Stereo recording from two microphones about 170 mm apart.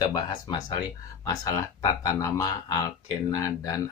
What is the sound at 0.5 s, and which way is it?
Speech, 25° left (ahead or behind).